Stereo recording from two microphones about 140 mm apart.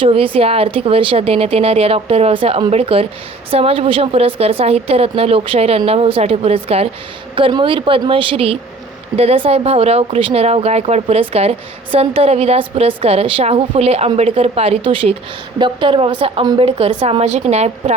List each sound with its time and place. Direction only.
0.0 s a woman's voice: 40° right (ahead or behind)